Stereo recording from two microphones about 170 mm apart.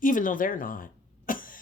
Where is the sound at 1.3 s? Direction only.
55° left (ahead or behind).